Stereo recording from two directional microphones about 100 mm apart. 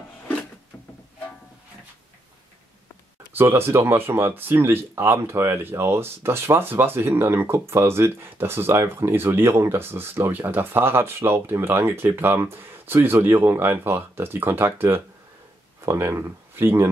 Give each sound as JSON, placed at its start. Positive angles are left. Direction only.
{"t": 3.3, "sound": "speech", "side_deg": -25}